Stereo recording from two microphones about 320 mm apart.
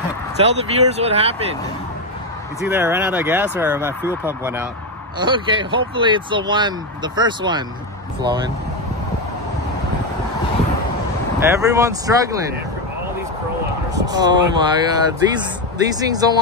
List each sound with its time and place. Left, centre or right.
0.4 s speech: centre
2.6 s speech: centre
11.3 s speech: centre
13.9 s speech: centre